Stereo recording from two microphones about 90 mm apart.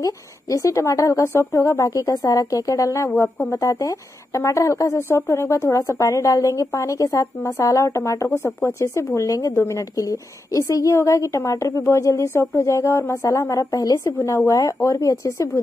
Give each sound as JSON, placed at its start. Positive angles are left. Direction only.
{"t": 0.0, "sound": "a woman's voice", "side_deg": 35}